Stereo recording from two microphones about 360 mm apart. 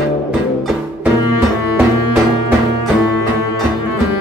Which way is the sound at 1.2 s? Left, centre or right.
Left.